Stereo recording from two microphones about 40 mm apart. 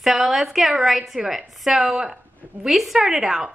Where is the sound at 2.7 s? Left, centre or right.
Centre.